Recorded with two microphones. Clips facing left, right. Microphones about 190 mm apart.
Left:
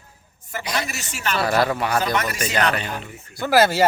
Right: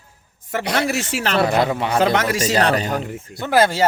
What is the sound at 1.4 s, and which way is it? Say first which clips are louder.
Speech: right 2 dB; 20° right (ahead or behind).